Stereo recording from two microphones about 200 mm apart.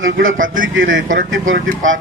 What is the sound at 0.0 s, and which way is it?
A man's voice, 75° right (ahead or behind).